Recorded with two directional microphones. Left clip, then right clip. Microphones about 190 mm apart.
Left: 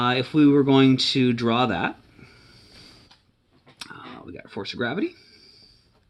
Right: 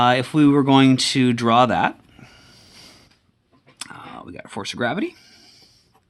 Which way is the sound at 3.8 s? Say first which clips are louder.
Right 3 dB; 30° right (ahead or behind).